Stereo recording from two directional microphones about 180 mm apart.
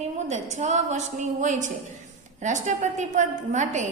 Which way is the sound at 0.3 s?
40° right (ahead or behind).